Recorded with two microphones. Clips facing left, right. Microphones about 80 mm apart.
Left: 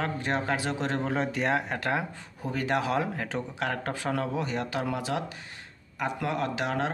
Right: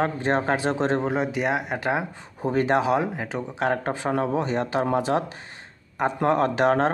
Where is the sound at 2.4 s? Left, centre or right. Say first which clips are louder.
Right 7 dB; right; by 3.4 s centre.